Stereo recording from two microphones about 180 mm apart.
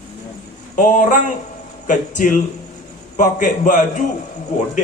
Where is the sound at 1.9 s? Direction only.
45° left (ahead or behind).